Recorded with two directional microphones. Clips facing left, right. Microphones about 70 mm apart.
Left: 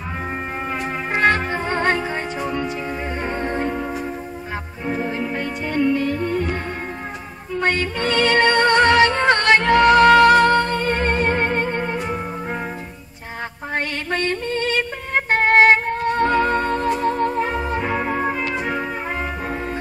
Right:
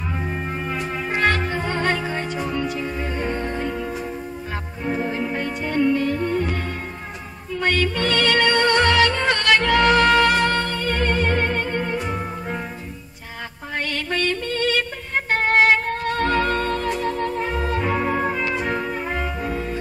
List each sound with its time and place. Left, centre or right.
1.1 s music: left
7.6 s music: left
13.7 s mantra: left
14.4 s music: left
15.1 s music: left
17.7 s music: centre
19.4 s music: left